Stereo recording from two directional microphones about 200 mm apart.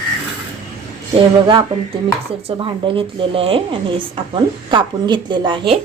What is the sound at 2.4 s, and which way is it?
Speech, 25° right (ahead or behind).